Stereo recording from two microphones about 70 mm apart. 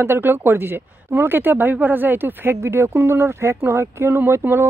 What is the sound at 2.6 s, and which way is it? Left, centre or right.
Speech, right.